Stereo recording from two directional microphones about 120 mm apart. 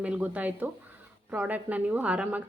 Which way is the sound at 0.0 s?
10° right (ahead or behind).